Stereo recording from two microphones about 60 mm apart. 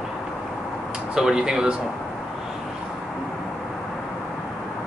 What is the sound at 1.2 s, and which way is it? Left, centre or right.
Speech, centre.